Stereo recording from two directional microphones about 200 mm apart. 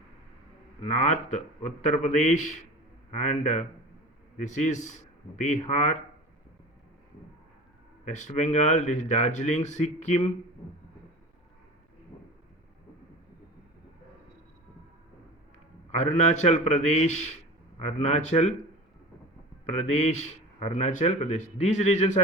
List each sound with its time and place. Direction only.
0.8 s speech: 35° left (ahead or behind)
8.0 s speech: 35° left (ahead or behind)
15.9 s speech: 35° left (ahead or behind)
19.7 s speech: 35° left (ahead or behind)